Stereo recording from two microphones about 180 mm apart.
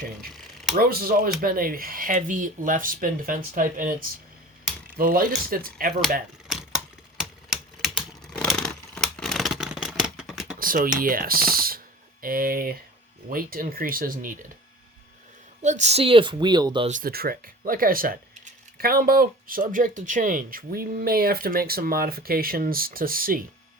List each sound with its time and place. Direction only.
0.8 s speech: 55° right (ahead or behind)
4.9 s speech: 55° right (ahead or behind)
6.5 s typing: 5° right (ahead or behind)
10.6 s speech: 50° right (ahead or behind)
15.6 s speech: 40° right (ahead or behind); by 16.9 s 25° right (ahead or behind)
16.9 s speech: 55° right (ahead or behind)